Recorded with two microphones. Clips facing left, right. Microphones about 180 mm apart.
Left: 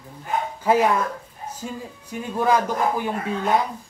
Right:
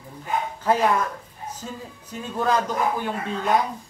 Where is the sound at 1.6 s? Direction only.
10° left (ahead or behind).